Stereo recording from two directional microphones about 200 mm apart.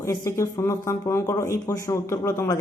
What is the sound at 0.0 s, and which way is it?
Speech, 15° left (ahead or behind).